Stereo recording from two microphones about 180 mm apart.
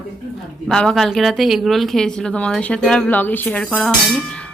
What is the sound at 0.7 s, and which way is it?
Speech, 5° left (ahead or behind).